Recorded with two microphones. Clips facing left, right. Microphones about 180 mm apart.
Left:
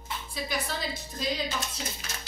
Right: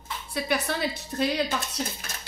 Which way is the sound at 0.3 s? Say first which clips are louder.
Right 6 dB; 65° right (ahead or behind).